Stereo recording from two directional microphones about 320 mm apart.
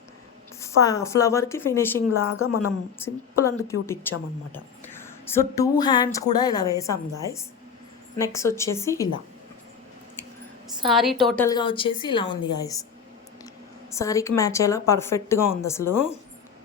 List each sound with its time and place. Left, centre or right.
0.6 s a woman's voice: centre
2.0 s speech: left
3.0 s a woman's voice: centre
4.5 s a sound: centre
5.8 s a woman's voice: centre
8.2 s a woman's voice: centre
10.8 s a woman's voice: centre
13.9 s a woman's voice: centre